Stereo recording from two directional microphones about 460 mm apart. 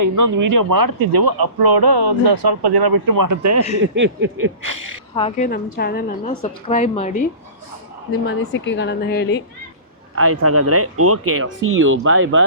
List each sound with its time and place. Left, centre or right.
0.0 s speech: right
3.9 s speech: right
4.6 s speech: right
5.1 s a woman's voice: centre
8.3 s a woman's voice: left
10.2 s speech: right